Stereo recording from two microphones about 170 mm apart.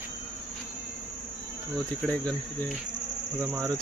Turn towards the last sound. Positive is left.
turn(degrees=-20)  # may be behind; listen again after turning